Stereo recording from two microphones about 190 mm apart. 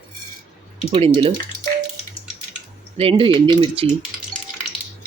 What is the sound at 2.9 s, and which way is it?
Speech, 30° right (ahead or behind).